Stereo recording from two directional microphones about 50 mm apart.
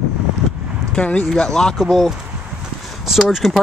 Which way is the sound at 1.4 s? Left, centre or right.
Centre.